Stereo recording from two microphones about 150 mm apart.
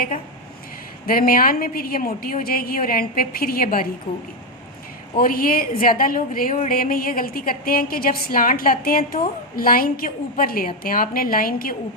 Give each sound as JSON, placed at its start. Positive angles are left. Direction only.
{"t": 1.0, "sound": "a woman's voice", "side_deg": 75}
{"t": 5.1, "sound": "a woman's voice", "side_deg": 75}